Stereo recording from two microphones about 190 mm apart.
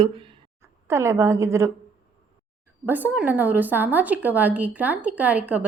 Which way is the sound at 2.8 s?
10° right (ahead or behind).